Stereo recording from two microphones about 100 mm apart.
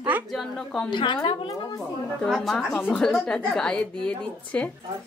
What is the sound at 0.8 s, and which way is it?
Speech, 50° left (ahead or behind).